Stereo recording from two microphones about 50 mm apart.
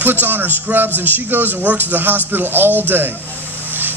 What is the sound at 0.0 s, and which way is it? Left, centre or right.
A man's voice, right.